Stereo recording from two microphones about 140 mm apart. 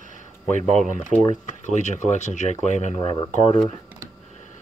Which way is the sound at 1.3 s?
55° left (ahead or behind).